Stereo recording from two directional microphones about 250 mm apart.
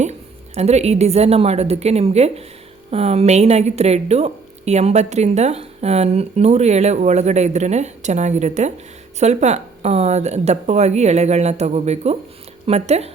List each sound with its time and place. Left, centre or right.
0.0 s a woman's voice: right